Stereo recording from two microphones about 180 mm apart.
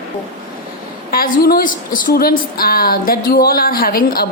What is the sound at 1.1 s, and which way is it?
A woman's voice, 55° left (ahead or behind).